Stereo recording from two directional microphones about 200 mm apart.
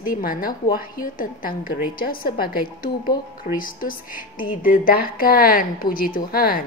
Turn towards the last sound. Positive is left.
turn(degrees=45)  # may be behind; listen again after turning